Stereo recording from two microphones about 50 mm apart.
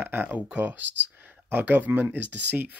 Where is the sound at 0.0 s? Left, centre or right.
Right.